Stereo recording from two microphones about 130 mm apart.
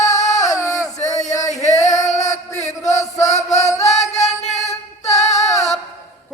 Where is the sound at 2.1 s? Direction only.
65° left (ahead or behind).